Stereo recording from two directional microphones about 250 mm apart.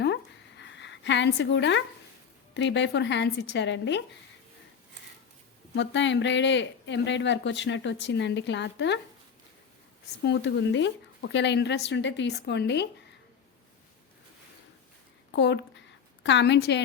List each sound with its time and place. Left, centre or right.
0.0 s a sound: left
2.6 s speech: left
5.7 s speech: left
10.2 s speech: left
15.3 s a woman's voice: left